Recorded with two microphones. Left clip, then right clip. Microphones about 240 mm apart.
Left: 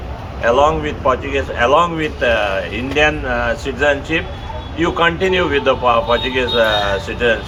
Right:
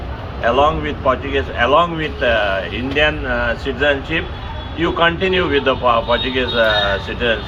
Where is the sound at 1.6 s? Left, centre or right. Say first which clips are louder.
Left 1 dB; left.